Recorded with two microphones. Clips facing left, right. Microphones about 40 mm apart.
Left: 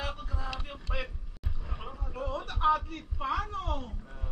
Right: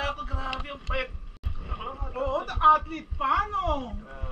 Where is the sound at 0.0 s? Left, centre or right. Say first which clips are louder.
Right 6 dB; right.